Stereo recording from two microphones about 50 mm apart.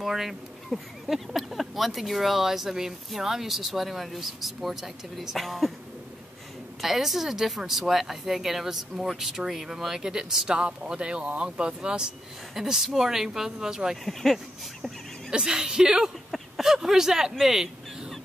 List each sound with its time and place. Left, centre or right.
0.0 s speech: centre
6.8 s speech: centre
12.5 s speech: centre
14.0 s speech: centre
15.3 s speech: centre